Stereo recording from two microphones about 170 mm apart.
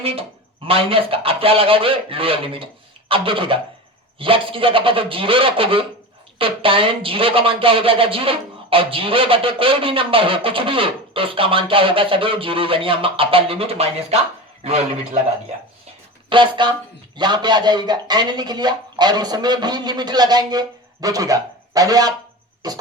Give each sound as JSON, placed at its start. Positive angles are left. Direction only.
{"t": 0.0, "sound": "speech", "side_deg": -35}
{"t": 16.3, "sound": "a man's voice", "side_deg": -30}